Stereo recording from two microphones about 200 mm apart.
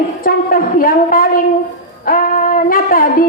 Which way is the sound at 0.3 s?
45° left (ahead or behind).